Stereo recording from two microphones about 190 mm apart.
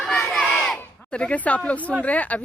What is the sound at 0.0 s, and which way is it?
Speech, 5° left (ahead or behind).